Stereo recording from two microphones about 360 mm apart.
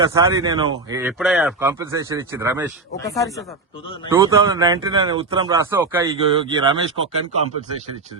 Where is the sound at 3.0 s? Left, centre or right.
Centre.